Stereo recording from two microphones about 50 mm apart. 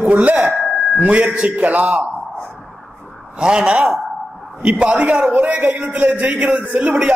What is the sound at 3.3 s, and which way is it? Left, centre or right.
A man's voice, centre.